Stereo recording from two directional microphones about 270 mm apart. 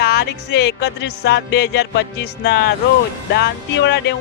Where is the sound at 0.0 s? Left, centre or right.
Left.